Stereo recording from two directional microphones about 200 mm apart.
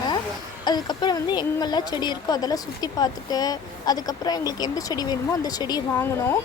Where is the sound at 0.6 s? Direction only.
20° left (ahead or behind).